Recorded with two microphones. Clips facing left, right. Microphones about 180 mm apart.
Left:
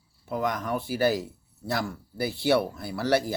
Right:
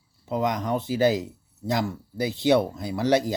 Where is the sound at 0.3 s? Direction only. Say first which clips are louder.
Right 3 dB; 20° right (ahead or behind).